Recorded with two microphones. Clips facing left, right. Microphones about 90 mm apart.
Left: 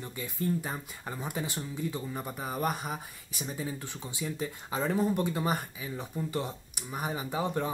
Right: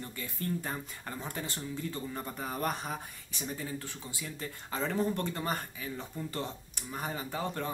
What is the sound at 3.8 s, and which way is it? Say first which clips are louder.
Speech: left 4 dB; 20° left (ahead or behind).